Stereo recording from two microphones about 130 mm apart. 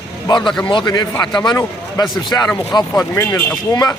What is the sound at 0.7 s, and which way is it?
A man's voice, 35° left (ahead or behind).